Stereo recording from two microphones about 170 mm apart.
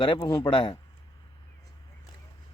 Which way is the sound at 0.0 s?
30° left (ahead or behind).